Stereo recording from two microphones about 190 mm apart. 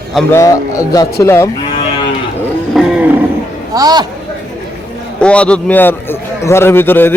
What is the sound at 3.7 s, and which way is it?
Speech, 20° right (ahead or behind).